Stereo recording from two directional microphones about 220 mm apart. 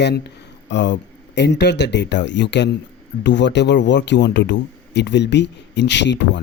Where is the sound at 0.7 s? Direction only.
55° left (ahead or behind).